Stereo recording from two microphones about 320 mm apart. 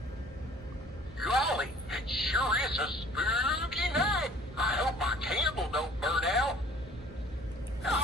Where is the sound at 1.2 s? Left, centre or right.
Centre.